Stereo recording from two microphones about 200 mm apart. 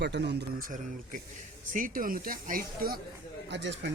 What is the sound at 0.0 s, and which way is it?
Speech, 60° right (ahead or behind).